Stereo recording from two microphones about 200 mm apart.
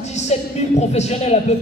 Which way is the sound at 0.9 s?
35° left (ahead or behind).